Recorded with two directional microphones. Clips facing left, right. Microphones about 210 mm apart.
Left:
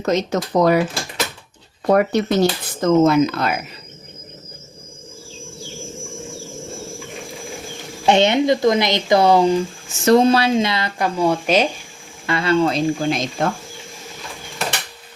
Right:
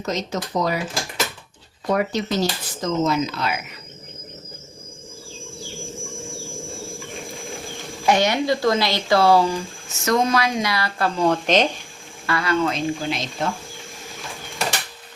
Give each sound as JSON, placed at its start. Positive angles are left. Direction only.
{"t": 0.0, "sound": "speech", "side_deg": 60}
{"t": 1.9, "sound": "speech", "side_deg": 60}
{"t": 8.0, "sound": "speech", "side_deg": 25}
{"t": 10.0, "sound": "speech", "side_deg": 30}
{"t": 12.2, "sound": "speech", "side_deg": 25}